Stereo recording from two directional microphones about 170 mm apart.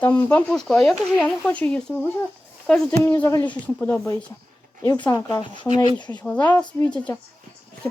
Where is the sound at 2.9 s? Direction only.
15° left (ahead or behind).